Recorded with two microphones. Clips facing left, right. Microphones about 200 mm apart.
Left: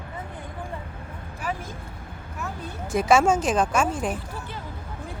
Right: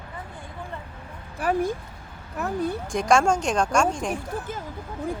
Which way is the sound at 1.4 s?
40° right (ahead or behind).